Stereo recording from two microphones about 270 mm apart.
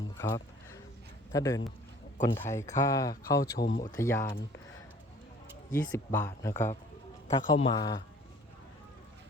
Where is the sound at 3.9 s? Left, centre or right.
Centre.